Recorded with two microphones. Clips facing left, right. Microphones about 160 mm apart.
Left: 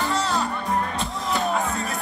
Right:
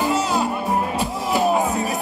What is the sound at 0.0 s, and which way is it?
Music, 10° right (ahead or behind).